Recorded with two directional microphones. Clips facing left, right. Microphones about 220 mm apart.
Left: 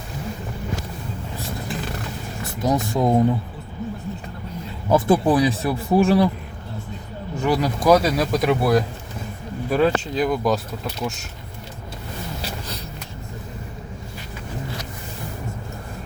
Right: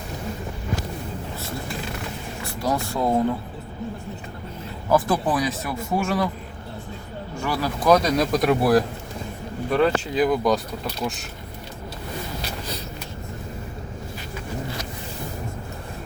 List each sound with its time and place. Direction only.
2.4 s speech: 20° left (ahead or behind)
4.9 s speech: 25° left (ahead or behind)
7.4 s speech: 20° left (ahead or behind)
7.9 s speech: 5° left (ahead or behind)